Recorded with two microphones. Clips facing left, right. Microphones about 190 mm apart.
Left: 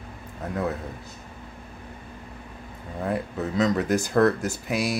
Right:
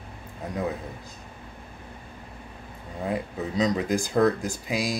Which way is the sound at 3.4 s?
15° right (ahead or behind).